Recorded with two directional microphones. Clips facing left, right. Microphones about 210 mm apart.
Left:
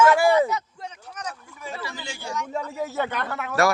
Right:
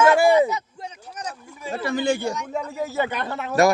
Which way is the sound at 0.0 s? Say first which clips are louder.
Right 2 dB; 25° right (ahead or behind).